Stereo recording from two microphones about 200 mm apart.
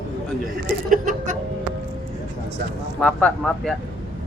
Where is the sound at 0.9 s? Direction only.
40° right (ahead or behind).